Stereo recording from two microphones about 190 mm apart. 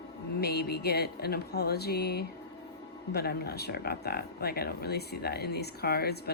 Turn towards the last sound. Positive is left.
turn(degrees=55)  # may be behind; listen again after turning